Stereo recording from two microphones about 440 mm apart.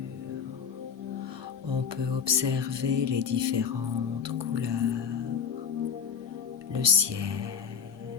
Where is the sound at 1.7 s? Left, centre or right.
Right.